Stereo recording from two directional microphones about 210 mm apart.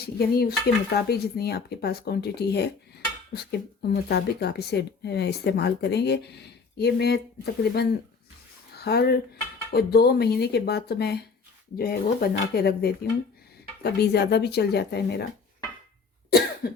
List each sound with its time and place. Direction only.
0.0 s speech: 50° left (ahead or behind)
8.7 s a sound: 50° left (ahead or behind)
9.7 s speech: 50° left (ahead or behind)
16.6 s cough: 50° left (ahead or behind)